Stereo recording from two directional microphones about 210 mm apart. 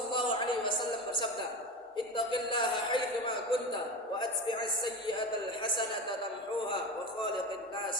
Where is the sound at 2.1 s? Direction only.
25° left (ahead or behind).